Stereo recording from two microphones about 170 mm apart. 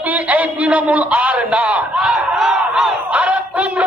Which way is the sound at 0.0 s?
10° right (ahead or behind).